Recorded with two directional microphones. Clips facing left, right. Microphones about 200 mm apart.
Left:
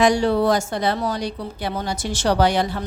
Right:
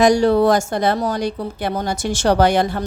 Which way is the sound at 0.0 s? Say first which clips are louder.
Right 4 dB; 40° right (ahead or behind).